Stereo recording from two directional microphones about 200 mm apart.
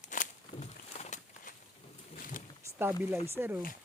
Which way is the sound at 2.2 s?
40° left (ahead or behind).